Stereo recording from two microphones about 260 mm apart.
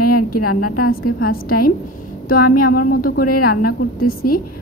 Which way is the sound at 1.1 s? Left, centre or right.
Left.